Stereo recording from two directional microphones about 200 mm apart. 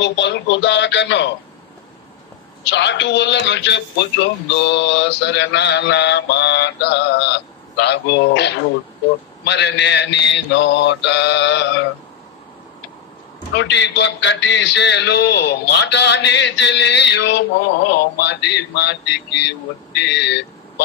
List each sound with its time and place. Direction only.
0.0 s a man's voice: 60° left (ahead or behind)
2.6 s a man's voice: 60° left (ahead or behind)
13.6 s a man's voice: 60° left (ahead or behind)
20.1 s speech: 60° left (ahead or behind)